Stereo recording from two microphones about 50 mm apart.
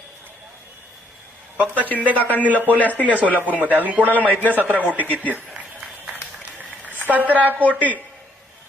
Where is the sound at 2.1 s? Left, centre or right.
Left.